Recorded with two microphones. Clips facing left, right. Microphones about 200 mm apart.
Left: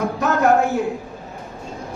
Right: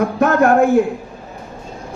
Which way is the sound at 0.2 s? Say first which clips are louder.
Right 4 dB; 55° right (ahead or behind).